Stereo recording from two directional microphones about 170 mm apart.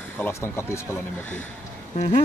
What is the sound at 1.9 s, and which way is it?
Speech, 35° left (ahead or behind).